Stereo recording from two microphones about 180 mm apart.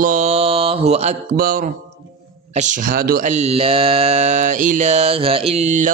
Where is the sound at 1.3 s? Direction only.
50° right (ahead or behind).